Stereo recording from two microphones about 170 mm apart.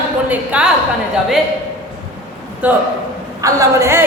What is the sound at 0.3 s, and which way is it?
Speech, 5° right (ahead or behind).